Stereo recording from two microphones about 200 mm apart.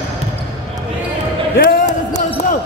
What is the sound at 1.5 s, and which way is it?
Basketball bounce, 40° left (ahead or behind).